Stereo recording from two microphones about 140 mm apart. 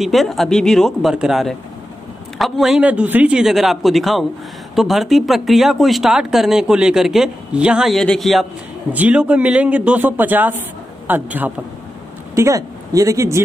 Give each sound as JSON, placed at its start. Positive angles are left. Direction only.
{"t": 0.0, "sound": "a man's voice", "side_deg": 0}
{"t": 12.4, "sound": "speech", "side_deg": -25}